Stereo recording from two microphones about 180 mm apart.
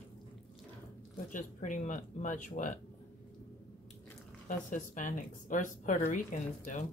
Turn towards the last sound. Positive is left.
turn(degrees=45)  # may be behind; listen again after turning